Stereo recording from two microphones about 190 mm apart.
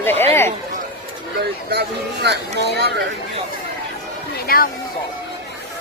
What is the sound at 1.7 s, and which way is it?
Speech, 60° right (ahead or behind).